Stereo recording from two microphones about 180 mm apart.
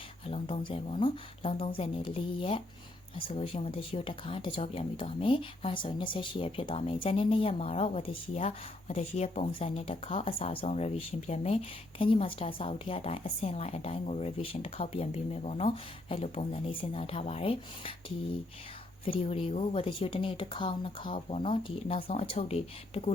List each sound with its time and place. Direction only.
0.3 s speech: 30° left (ahead or behind)
19.0 s speech: 30° left (ahead or behind)